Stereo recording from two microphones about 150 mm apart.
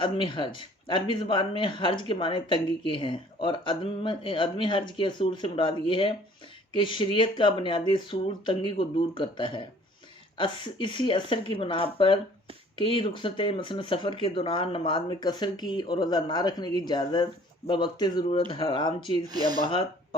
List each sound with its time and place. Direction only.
0.0 s speech: 35° left (ahead or behind)
19.3 s speech: 25° right (ahead or behind)